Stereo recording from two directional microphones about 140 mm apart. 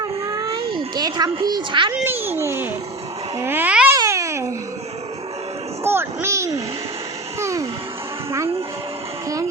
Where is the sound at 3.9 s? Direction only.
20° right (ahead or behind).